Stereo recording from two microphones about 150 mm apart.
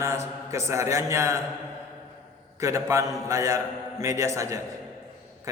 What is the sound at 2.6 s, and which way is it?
A man's voice, 20° right (ahead or behind).